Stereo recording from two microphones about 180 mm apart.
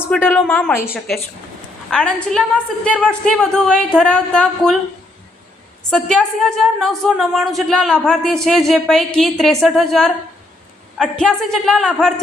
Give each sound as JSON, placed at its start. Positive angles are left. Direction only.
{"t": 0.1, "sound": "a woman's voice", "side_deg": 10}
{"t": 0.9, "sound": "a woman's voice", "side_deg": 0}
{"t": 5.9, "sound": "a woman's voice", "side_deg": 0}